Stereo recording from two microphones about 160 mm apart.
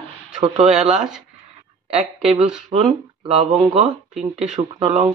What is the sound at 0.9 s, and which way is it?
Speech, 5° right (ahead or behind).